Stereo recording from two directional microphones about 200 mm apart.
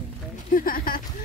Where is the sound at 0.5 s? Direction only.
45° left (ahead or behind).